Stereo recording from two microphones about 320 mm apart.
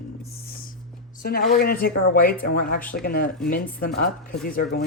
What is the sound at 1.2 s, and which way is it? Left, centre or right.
Speech, left.